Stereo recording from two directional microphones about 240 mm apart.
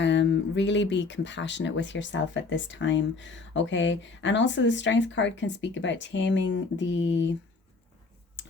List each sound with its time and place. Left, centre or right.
0.0 s speech: left